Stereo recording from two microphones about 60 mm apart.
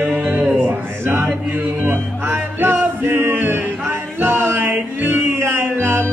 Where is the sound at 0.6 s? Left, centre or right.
Right.